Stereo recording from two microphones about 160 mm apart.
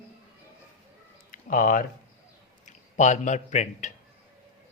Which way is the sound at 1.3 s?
60° left (ahead or behind).